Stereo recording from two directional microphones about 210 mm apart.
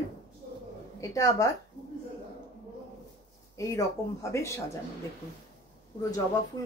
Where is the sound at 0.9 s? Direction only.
15° left (ahead or behind).